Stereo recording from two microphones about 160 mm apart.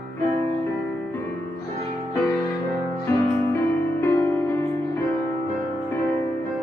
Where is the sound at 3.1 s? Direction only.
15° left (ahead or behind).